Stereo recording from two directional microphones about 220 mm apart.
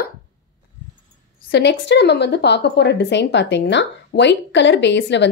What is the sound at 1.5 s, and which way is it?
A woman's voice, 50° left (ahead or behind).